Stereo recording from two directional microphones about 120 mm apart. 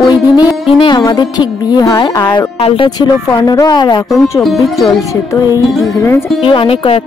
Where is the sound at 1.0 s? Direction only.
35° left (ahead or behind).